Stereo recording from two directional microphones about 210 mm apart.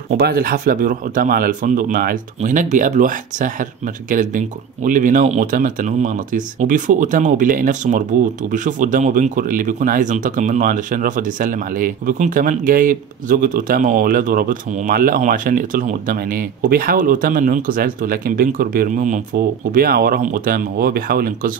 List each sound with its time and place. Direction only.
0.2 s speech: 45° right (ahead or behind)